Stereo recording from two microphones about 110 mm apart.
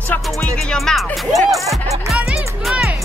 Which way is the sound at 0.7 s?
Centre (ahead or behind).